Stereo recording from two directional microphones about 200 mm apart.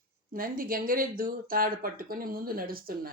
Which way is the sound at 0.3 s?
45° right (ahead or behind).